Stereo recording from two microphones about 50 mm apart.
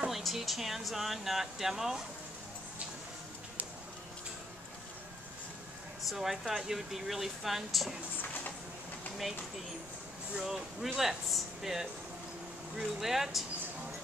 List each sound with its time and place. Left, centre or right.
0.1 s speech: centre
6.0 s speech: centre
10.3 s speech: centre